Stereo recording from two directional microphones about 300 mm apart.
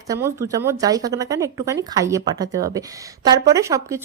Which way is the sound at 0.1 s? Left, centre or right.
Centre.